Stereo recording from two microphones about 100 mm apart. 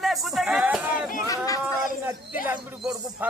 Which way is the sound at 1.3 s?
35° left (ahead or behind).